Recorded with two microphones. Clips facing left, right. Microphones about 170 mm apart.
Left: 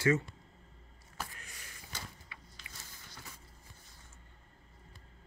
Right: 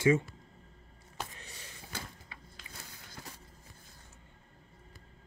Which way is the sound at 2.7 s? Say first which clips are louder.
Right 5 dB; 60° right (ahead or behind).